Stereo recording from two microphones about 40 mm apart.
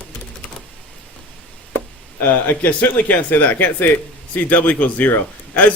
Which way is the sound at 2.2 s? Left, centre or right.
Left.